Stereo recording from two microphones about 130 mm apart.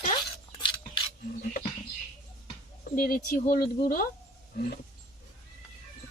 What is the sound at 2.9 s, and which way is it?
Speech, 90° left.